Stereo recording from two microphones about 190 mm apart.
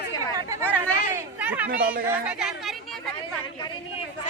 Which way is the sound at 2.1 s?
5° right (ahead or behind).